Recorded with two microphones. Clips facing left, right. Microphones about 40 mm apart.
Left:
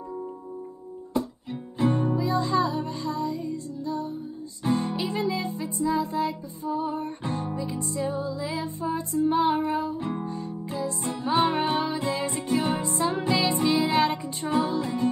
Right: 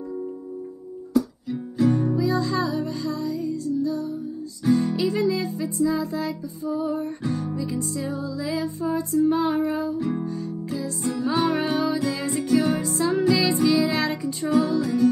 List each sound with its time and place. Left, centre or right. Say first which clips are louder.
1.1 s music: right 6 dB; left